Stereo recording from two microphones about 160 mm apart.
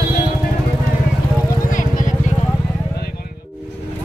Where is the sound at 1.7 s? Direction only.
55° left (ahead or behind).